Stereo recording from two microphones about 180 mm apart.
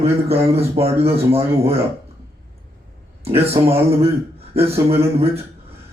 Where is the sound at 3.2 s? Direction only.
35° right (ahead or behind).